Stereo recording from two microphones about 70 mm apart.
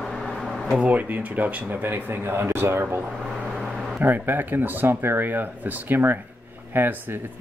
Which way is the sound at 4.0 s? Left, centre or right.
Right.